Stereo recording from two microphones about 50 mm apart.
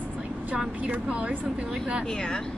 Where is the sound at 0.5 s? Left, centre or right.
Right.